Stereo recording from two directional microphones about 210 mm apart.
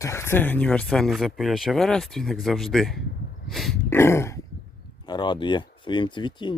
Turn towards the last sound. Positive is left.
turn(degrees=20)  # may be behind; listen again after turning